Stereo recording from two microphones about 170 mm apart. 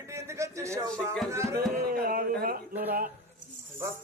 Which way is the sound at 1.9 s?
60° right (ahead or behind).